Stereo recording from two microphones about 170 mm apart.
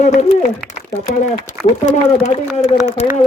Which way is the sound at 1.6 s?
40° left (ahead or behind).